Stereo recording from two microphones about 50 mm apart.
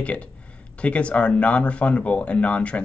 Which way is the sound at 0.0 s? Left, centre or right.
Left.